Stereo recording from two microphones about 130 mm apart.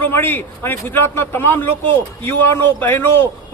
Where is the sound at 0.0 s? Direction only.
15° left (ahead or behind).